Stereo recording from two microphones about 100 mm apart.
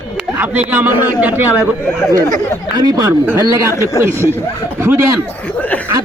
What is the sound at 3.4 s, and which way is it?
A man's voice, 30° right (ahead or behind).